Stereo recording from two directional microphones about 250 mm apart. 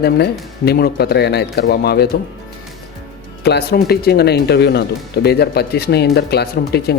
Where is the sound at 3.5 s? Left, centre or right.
Left.